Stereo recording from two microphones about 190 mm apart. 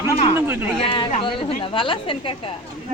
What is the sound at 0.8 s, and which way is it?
A woman's voice, 30° left (ahead or behind).